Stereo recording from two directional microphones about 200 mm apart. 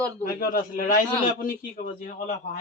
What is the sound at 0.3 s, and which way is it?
A man's voice, 45° left (ahead or behind).